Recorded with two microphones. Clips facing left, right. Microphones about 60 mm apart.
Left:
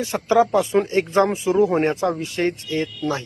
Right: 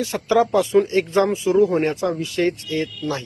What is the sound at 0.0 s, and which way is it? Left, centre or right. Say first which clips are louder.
Speech: left 1 dB; left.